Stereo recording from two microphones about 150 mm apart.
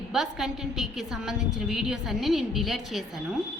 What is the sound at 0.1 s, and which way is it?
A woman's voice, 5° right (ahead or behind).